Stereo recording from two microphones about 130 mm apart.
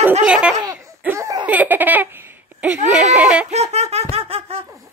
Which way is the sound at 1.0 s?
20° right (ahead or behind).